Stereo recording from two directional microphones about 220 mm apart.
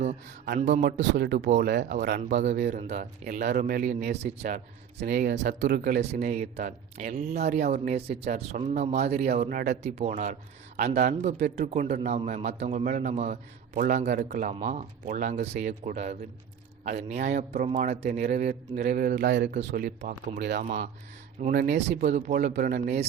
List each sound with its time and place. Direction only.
0.0 s speech: 35° right (ahead or behind)
0.9 s speech: 50° right (ahead or behind)
5.8 s speech: 35° right (ahead or behind); by 21.9 s 50° right (ahead or behind)
22.0 s speech: 30° right (ahead or behind)